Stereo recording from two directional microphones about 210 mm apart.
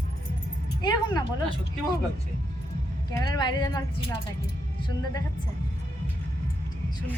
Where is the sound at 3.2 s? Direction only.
20° left (ahead or behind).